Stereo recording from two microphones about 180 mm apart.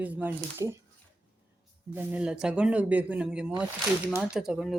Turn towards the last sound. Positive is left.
turn(degrees=0)  # may be behind; listen again after turning